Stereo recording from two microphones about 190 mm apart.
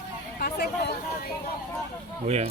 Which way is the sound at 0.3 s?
55° left (ahead or behind).